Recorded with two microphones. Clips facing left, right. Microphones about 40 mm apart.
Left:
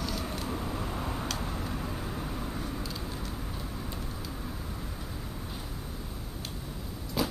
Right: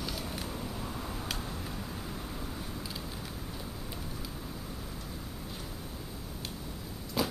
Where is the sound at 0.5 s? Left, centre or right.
Left.